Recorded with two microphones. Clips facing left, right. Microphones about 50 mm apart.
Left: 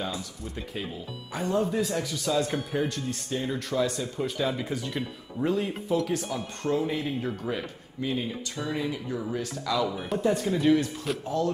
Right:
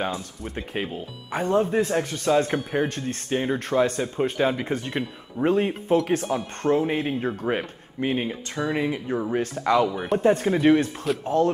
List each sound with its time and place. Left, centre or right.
0.9 s speech: right
8.5 s speech: right
9.8 s speech: centre
10.2 s speech: right